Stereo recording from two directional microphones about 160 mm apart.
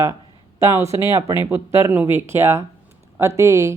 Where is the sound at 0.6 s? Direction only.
20° right (ahead or behind).